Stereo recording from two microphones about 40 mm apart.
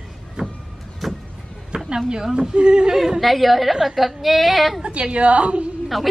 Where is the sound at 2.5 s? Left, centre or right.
Right.